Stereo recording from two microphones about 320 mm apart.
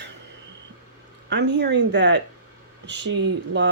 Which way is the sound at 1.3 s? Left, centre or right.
Right.